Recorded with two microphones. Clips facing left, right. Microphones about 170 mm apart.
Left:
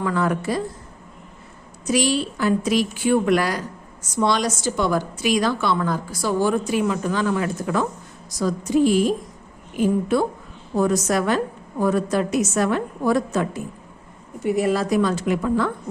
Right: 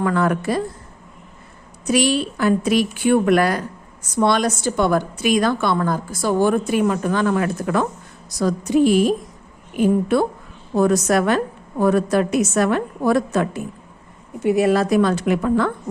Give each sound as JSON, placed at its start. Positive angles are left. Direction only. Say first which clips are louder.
{"t": 0.0, "sound": "a woman's voice", "louder": "right 3 dB", "side_deg": -60}
{"t": 1.9, "sound": "a woman's voice", "louder": "right 2 dB", "side_deg": -60}